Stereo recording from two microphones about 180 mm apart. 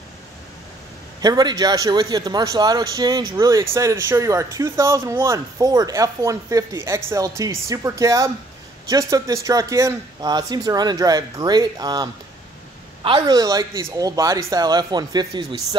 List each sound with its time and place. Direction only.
1.2 s a man's voice: 20° right (ahead or behind)